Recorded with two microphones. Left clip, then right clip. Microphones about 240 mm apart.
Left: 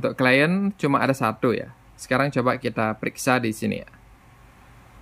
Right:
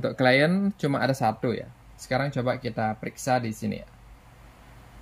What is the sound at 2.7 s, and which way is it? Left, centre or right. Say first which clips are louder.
Speech: left 4 dB; left.